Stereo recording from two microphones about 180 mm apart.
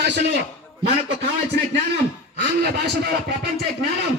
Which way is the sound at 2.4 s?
70° right (ahead or behind).